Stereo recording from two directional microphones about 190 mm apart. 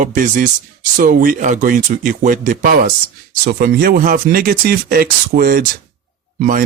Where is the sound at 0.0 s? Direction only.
45° right (ahead or behind).